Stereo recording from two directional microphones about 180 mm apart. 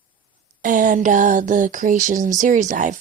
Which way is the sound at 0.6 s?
45° right (ahead or behind).